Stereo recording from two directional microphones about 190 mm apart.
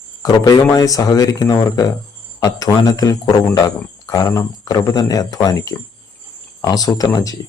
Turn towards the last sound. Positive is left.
turn(degrees=20)  # may be behind; listen again after turning